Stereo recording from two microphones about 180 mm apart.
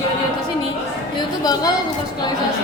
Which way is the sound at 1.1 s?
20° left (ahead or behind).